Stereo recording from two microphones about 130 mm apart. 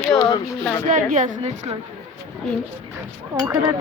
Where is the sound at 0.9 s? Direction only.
75° right (ahead or behind).